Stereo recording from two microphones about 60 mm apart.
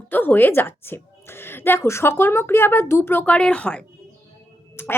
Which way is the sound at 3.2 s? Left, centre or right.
Centre.